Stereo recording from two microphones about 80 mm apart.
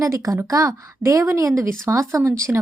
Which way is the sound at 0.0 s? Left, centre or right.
Right.